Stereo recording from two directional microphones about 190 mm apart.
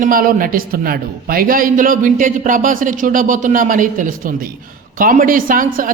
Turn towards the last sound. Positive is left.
turn(degrees=-45)  # may be behind; listen again after turning